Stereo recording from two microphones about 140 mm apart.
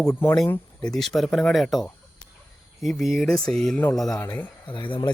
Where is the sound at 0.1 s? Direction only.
20° left (ahead or behind); by 3.8 s 5° left (ahead or behind).